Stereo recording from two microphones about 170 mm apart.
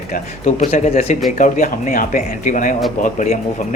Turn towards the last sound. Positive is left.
turn(degrees=45)  # may be behind; listen again after turning